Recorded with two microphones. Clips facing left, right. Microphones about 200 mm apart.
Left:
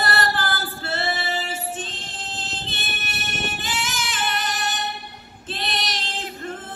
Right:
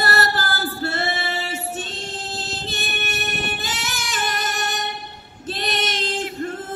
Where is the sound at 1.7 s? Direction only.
40° right (ahead or behind).